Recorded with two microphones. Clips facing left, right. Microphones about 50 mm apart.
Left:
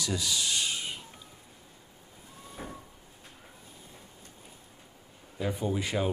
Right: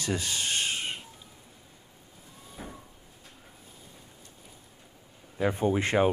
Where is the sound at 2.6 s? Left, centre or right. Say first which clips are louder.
Left 1 dB; centre.